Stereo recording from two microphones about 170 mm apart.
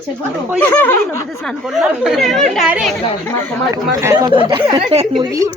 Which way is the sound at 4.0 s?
20° right (ahead or behind).